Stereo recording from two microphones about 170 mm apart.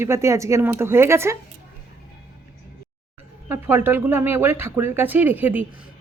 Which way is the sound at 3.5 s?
15° right (ahead or behind).